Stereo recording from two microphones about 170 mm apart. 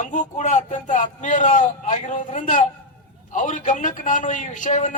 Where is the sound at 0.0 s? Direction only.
45° left (ahead or behind).